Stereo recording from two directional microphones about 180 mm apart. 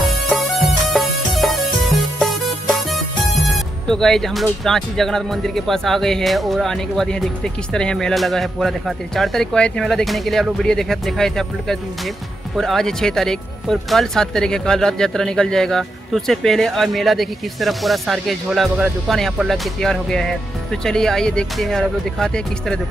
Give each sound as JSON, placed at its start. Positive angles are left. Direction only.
{"t": 0.3, "sound": "music", "side_deg": 0}
{"t": 3.5, "sound": "speech", "side_deg": 0}